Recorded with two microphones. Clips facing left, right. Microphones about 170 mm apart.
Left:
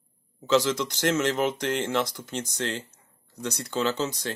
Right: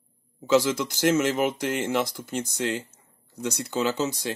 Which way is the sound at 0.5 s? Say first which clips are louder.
Right 1 dB; 10° right (ahead or behind).